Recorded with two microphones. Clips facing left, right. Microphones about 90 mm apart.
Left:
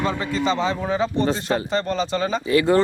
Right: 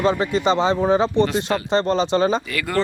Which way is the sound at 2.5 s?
25° left (ahead or behind).